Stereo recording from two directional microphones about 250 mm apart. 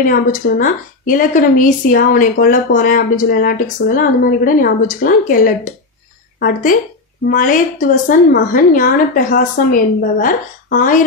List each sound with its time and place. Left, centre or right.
0.0 s a woman's voice: left